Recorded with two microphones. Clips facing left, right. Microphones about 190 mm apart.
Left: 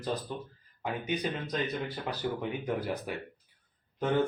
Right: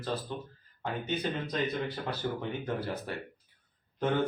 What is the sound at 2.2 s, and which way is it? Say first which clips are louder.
Speech: left 2 dB; 10° left (ahead or behind).